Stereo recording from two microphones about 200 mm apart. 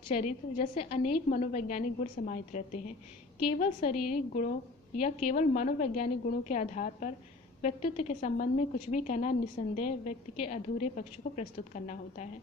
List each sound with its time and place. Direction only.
0.1 s a woman's voice: 35° left (ahead or behind)